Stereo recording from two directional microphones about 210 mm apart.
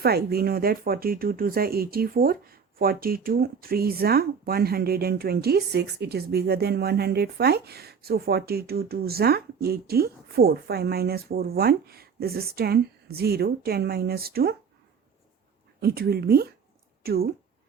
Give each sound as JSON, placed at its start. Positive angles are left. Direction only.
{"t": 0.0, "sound": "speech", "side_deg": -50}
{"t": 15.8, "sound": "speech", "side_deg": -50}